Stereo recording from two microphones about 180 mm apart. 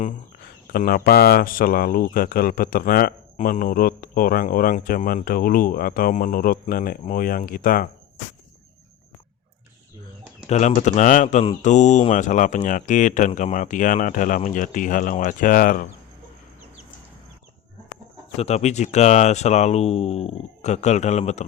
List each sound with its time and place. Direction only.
0.7 s speech: 55° left (ahead or behind)
10.4 s speech: 40° left (ahead or behind)
18.3 s speech: 35° left (ahead or behind)